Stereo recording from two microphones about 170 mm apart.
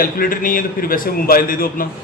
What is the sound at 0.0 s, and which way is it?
A man's voice, 55° left (ahead or behind).